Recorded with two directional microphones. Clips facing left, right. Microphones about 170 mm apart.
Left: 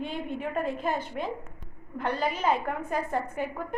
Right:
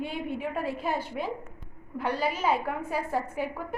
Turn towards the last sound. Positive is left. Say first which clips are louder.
# even
turn(degrees=-5)  # may be behind; listen again after turning